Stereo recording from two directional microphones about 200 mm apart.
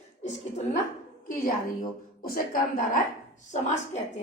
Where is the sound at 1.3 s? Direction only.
45° left (ahead or behind).